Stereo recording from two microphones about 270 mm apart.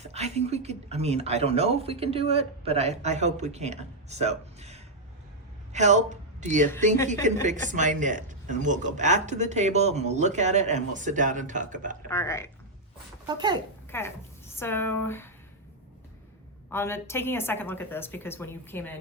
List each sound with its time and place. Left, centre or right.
0.0 s speech: right
12.0 s a woman's voice: centre
13.2 s speech: centre
13.9 s a woman's voice: centre
16.6 s a woman's voice: centre